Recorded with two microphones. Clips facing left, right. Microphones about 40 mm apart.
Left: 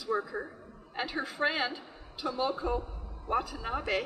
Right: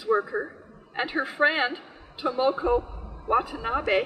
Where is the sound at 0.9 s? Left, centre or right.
Right.